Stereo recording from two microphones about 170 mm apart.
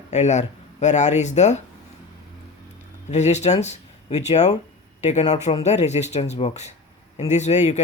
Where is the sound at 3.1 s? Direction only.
40° left (ahead or behind).